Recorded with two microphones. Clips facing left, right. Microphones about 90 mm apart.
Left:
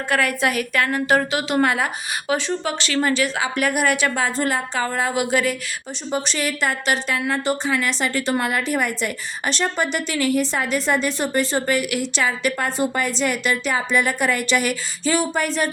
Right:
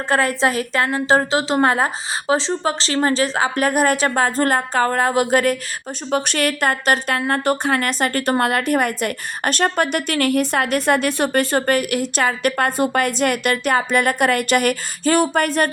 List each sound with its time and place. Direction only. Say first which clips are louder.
0.1 s a woman's voice: right 3 dB; 30° right (ahead or behind); by 5.5 s 45° right (ahead or behind)
6.1 s speech: right 4 dB; 60° right (ahead or behind)